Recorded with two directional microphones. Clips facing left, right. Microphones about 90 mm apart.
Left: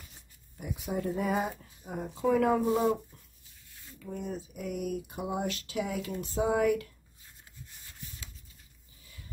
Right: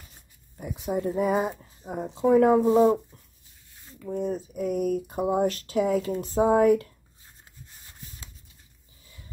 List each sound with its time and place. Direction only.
0.6 s speech: 25° right (ahead or behind)
7.7 s rub: 30° right (ahead or behind)